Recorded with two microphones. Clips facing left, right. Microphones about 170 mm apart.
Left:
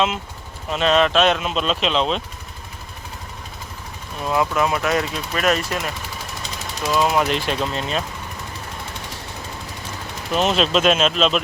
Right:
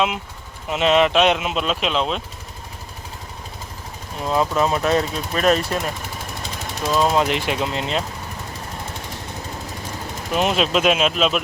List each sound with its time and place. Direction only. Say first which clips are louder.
0.7 s speech: right 1 dB; 15° right (ahead or behind)
4.2 s speech: right 1 dB; 25° right (ahead or behind)
6.8 s speech: right 1 dB; 5° left (ahead or behind)
7.1 s speech: right 1 dB; 20° right (ahead or behind)
10.3 s speech: left 1 dB; 10° right (ahead or behind)